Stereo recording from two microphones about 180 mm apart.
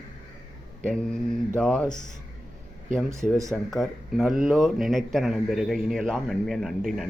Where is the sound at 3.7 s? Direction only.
Centre (ahead or behind).